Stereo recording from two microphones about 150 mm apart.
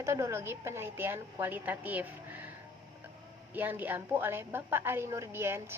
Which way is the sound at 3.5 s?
10° right (ahead or behind).